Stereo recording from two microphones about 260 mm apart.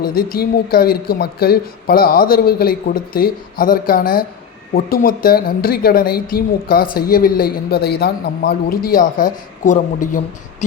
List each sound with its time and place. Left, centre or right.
0.1 s a woman's voice: left
0.3 s speech: left